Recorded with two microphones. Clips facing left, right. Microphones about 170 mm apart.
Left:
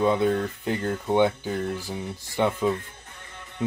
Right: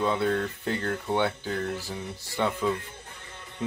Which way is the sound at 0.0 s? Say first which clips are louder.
Left 4 dB; 15° left (ahead or behind).